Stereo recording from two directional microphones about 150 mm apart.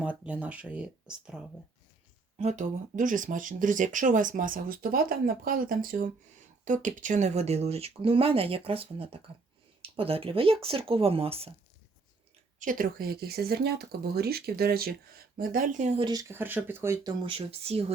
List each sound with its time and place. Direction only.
0.0 s speech: 10° right (ahead or behind)
2.4 s speech: 50° right (ahead or behind); by 6.1 s 70° right (ahead or behind)
6.7 s speech: 55° right (ahead or behind); by 11.5 s 40° right (ahead or behind)
12.5 s speech: 65° right (ahead or behind)
16.0 s speech: 30° right (ahead or behind)
16.3 s speech: 15° right (ahead or behind)
17.3 s speech: 40° right (ahead or behind)